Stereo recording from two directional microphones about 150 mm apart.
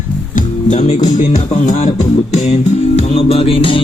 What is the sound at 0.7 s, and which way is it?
Speech, 50° left (ahead or behind).